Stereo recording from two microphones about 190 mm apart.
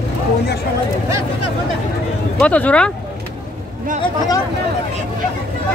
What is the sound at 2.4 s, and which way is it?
Speech, 5° left (ahead or behind).